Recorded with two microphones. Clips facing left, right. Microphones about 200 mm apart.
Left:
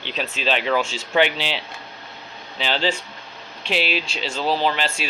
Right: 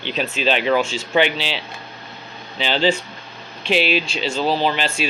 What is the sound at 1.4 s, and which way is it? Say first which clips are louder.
Speech: right 1 dB; 55° left (ahead or behind).